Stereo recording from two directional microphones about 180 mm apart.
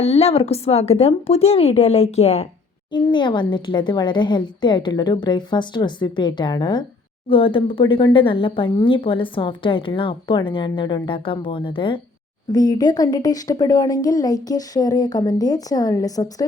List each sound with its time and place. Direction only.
0.0 s a woman's voice: 35° left (ahead or behind); by 16.3 s 20° left (ahead or behind)